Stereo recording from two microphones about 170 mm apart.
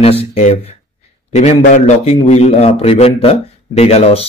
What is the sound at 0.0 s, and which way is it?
Mantra, 35° left (ahead or behind).